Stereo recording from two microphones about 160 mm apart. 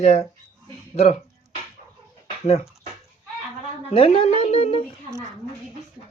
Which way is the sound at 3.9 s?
40° left (ahead or behind).